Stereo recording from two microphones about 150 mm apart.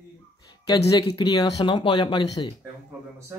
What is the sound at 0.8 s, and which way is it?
Speech, 25° left (ahead or behind).